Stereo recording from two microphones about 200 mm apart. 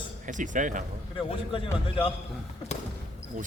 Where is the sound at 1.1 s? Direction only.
25° left (ahead or behind).